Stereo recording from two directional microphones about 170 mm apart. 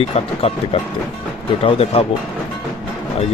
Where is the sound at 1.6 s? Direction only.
35° left (ahead or behind).